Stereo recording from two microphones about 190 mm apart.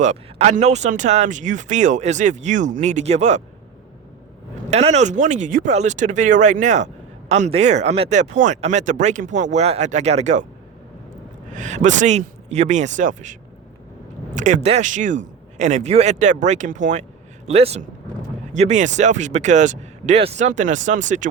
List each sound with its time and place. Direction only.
0.0 s speech: 35° right (ahead or behind)
4.7 s speech: 35° right (ahead or behind)
11.5 s speech: 40° right (ahead or behind)
14.3 s speech: 40° right (ahead or behind)